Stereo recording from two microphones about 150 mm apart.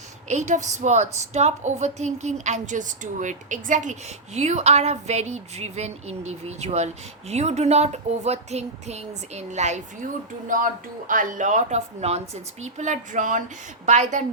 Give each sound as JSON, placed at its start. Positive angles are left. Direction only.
{"t": 0.3, "sound": "speech", "side_deg": -50}
{"t": 10.5, "sound": "speech", "side_deg": -65}